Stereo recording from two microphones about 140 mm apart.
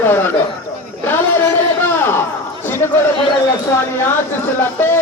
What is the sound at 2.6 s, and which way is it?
Chatter, 15° left (ahead or behind).